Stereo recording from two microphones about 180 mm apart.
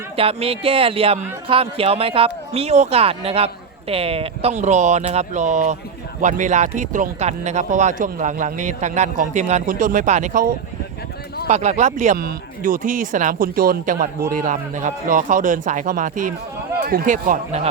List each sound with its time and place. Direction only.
0.2 s speech: 35° right (ahead or behind)